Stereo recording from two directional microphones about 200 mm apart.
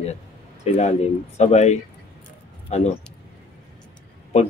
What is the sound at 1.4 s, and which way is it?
Speech, 35° left (ahead or behind).